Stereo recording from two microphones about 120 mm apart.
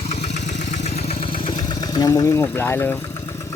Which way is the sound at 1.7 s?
35° left (ahead or behind).